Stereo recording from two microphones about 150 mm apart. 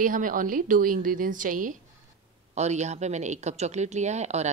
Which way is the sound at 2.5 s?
50° right (ahead or behind).